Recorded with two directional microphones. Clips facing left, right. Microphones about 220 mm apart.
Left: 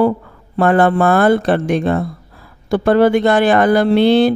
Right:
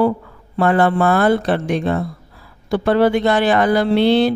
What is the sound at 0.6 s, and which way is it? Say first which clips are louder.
Speech: left 3 dB; 50° left (ahead or behind).